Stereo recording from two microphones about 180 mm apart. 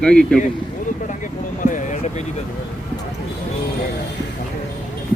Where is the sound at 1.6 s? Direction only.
45° left (ahead or behind).